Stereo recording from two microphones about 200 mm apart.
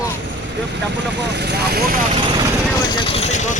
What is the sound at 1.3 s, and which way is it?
Speech, 55° right (ahead or behind).